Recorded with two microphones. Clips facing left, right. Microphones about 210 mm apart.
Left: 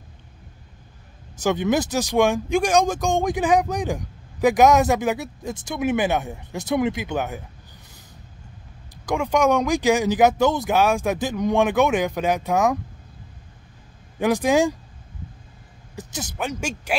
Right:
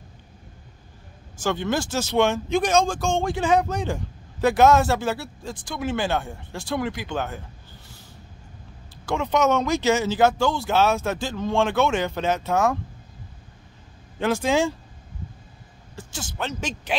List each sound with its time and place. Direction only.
1.3 s speech: 20° left (ahead or behind)
9.0 s speech: 15° left (ahead or behind)
14.1 s speech: 15° left (ahead or behind)
16.0 s speech: 20° left (ahead or behind)